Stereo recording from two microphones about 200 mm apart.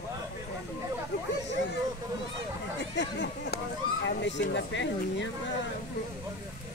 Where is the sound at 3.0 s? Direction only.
60° left (ahead or behind).